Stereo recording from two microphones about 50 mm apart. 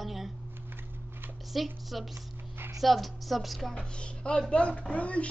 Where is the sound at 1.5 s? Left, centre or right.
Centre.